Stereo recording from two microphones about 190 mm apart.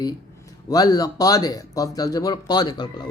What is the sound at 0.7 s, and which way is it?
Speech, 20° left (ahead or behind).